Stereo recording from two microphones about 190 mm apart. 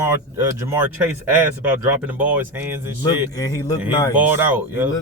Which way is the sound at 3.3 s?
20° left (ahead or behind).